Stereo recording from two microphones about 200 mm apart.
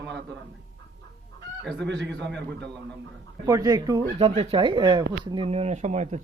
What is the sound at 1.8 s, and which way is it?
Speech, 60° right (ahead or behind).